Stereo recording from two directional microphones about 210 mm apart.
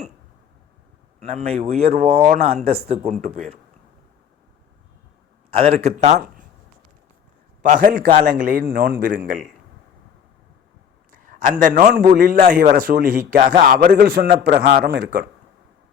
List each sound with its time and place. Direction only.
1.2 s speech: 30° right (ahead or behind)
2.1 s a man's voice: 45° right (ahead or behind)
2.6 s a man's voice: 30° right (ahead or behind)
5.5 s speech: 30° right (ahead or behind)
7.6 s a man's voice: 40° right (ahead or behind)
11.1 s a sound: 40° right (ahead or behind)
11.6 s a man's voice: 40° right (ahead or behind)